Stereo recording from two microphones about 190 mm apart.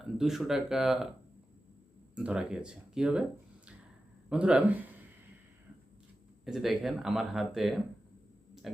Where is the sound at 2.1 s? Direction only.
5° right (ahead or behind).